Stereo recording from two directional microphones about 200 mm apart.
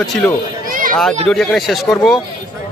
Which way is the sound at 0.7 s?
45° right (ahead or behind).